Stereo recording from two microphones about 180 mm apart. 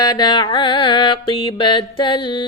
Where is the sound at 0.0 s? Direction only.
20° left (ahead or behind).